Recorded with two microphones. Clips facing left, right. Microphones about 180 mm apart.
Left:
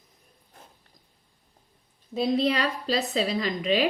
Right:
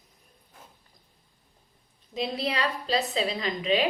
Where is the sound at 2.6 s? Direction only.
40° left (ahead or behind).